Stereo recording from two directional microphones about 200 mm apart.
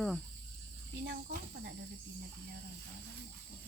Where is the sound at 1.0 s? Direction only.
50° right (ahead or behind).